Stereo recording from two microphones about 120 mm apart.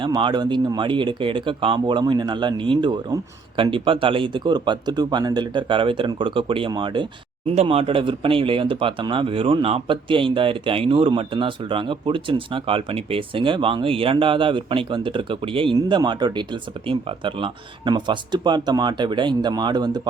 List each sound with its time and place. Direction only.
0.0 s speech: 40° right (ahead or behind)
7.5 s speech: 55° right (ahead or behind); by 20.0 s 35° right (ahead or behind)